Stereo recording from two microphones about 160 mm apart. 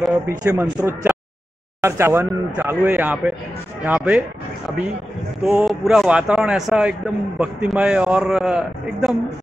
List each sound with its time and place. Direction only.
0.3 s speech: 20° right (ahead or behind)
5.4 s a man's voice: 5° right (ahead or behind)